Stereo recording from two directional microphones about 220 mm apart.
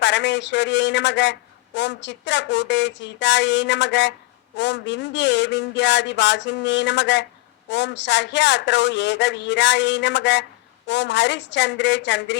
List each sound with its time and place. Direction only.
0.0 s a man's voice: 55° left (ahead or behind)